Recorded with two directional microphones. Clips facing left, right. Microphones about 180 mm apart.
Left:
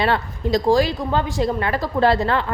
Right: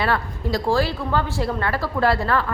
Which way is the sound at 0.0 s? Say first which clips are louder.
Left 2 dB; 20° left (ahead or behind).